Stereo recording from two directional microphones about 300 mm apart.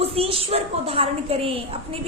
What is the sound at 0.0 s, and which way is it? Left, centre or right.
A woman's voice, centre.